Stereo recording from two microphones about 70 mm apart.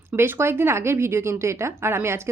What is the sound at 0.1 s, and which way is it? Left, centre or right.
A woman's voice, right.